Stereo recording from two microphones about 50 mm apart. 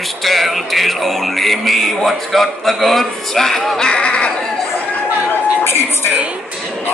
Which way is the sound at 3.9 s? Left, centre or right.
Left.